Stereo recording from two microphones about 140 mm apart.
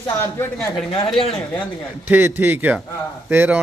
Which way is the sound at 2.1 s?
15° right (ahead or behind).